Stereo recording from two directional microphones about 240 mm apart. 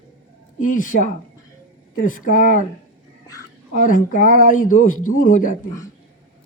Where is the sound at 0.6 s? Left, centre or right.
Left.